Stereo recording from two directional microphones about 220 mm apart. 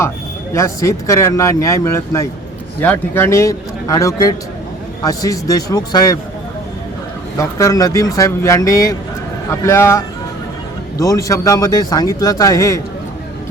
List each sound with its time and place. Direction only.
0.5 s speech: 15° left (ahead or behind)
7.3 s speech: 15° left (ahead or behind)